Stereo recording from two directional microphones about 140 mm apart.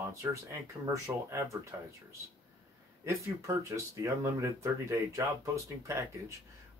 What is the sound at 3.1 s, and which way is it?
Speech, 20° right (ahead or behind).